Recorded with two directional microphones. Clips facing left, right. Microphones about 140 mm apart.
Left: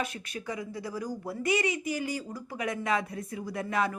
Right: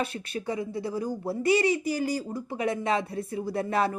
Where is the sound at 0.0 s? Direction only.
30° right (ahead or behind).